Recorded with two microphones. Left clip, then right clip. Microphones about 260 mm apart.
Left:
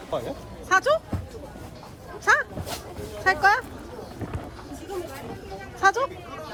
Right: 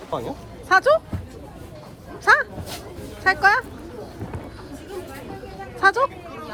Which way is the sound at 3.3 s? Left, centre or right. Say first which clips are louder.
Right 3 dB; centre.